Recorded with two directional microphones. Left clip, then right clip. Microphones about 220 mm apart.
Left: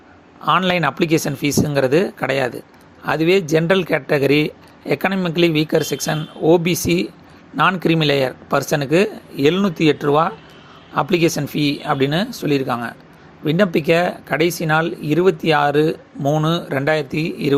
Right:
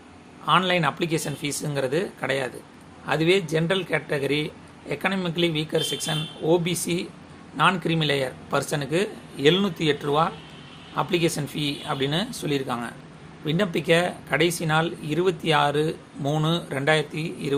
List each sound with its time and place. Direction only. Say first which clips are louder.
0.4 s speech: left 4 dB; 30° left (ahead or behind)